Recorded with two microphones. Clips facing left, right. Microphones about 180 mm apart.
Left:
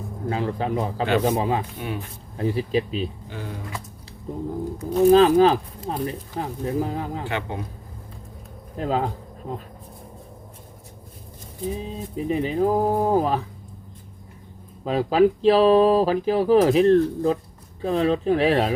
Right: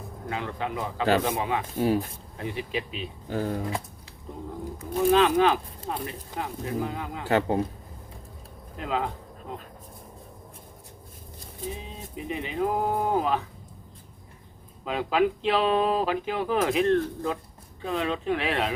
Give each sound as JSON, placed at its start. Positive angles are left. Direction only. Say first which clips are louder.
{"t": 0.3, "sound": "speech", "louder": "left 6 dB", "side_deg": 35}
{"t": 1.8, "sound": "a man's voice", "louder": "right 7 dB", "side_deg": -35}
{"t": 2.4, "sound": "speech", "louder": "left 8 dB", "side_deg": 35}
{"t": 3.2, "sound": "speech", "louder": "right 6 dB", "side_deg": -45}
{"t": 4.8, "sound": "speech", "louder": "left 6 dB", "side_deg": 35}
{"t": 7.3, "sound": "a man's voice", "louder": "right 5 dB", "side_deg": -40}
{"t": 8.8, "sound": "speech", "louder": "left 5 dB", "side_deg": 35}
{"t": 11.8, "sound": "speech", "louder": "left 9 dB", "side_deg": 35}
{"t": 14.8, "sound": "speech", "louder": "left 6 dB", "side_deg": 35}